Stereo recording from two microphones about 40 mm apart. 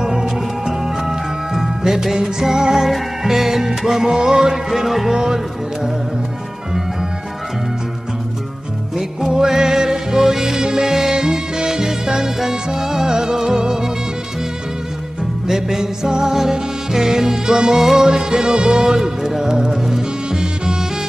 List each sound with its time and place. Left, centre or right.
0.0 s music: centre
4.6 s music: centre
9.3 s music: centre
15.4 s music: centre